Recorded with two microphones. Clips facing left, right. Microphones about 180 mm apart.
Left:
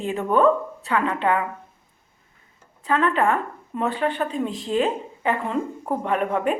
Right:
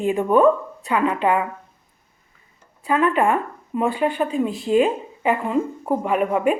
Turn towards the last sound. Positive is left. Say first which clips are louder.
# right 3 dB
turn(degrees=-10)  # may be behind; listen again after turning